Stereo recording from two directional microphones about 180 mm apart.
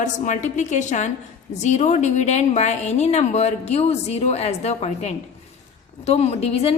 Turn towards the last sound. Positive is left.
turn(degrees=35)  # may be behind; listen again after turning